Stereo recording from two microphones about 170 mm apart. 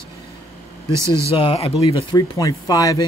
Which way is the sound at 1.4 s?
35° left (ahead or behind).